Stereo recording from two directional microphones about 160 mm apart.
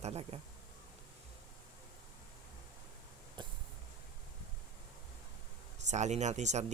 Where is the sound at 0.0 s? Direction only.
40° right (ahead or behind).